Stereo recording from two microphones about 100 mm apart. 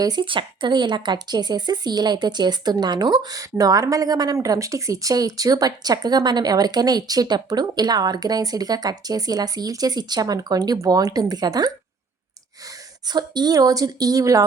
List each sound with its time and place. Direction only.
0.0 s speech: 50° right (ahead or behind)